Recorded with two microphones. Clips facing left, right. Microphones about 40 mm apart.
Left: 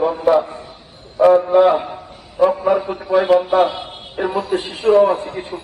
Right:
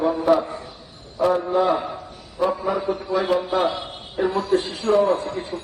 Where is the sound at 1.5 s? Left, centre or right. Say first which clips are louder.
Left 7 dB; left.